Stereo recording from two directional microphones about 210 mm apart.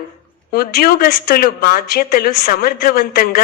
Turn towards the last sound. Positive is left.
turn(degrees=45)  # may be behind; listen again after turning